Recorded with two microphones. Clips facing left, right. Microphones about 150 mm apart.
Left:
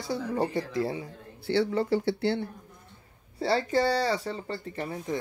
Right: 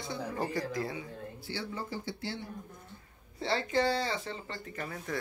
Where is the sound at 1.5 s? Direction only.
70° left (ahead or behind).